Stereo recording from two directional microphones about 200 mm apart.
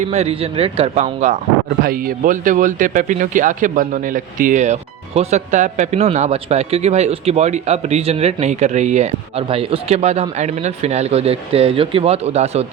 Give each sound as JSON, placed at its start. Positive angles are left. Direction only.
{"t": 0.1, "sound": "speech", "side_deg": -30}
{"t": 1.8, "sound": "speech", "side_deg": -45}